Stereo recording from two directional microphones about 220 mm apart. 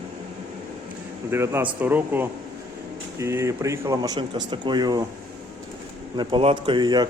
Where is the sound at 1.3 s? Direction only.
10° right (ahead or behind).